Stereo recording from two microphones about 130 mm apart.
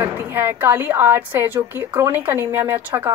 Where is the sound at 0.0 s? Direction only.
15° right (ahead or behind).